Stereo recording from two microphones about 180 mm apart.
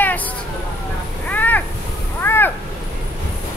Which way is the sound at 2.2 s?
10° left (ahead or behind).